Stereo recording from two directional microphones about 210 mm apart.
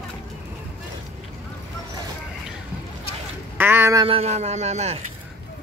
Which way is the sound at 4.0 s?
30° right (ahead or behind).